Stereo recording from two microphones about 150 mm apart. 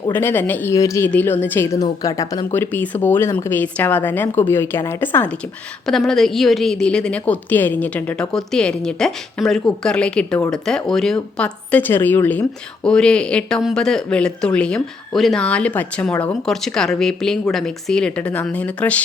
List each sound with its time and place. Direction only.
0.1 s a woman's voice: 15° left (ahead or behind)
2.6 s a woman's voice: 10° left (ahead or behind)
5.8 s a woman's voice: centre (ahead or behind)